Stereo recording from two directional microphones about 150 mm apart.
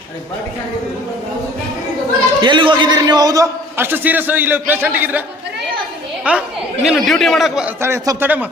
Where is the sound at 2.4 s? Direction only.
30° right (ahead or behind); by 5.2 s 10° right (ahead or behind).